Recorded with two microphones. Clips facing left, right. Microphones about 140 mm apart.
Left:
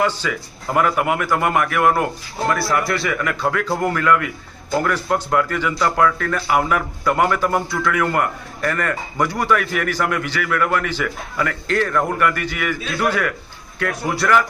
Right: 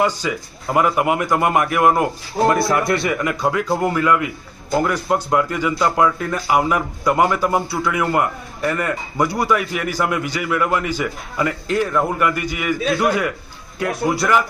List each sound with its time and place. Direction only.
0.0 s speech: 15° right (ahead or behind)